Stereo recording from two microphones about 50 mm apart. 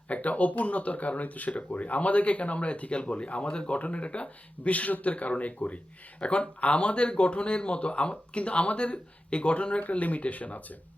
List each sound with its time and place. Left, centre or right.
0.1 s speech: left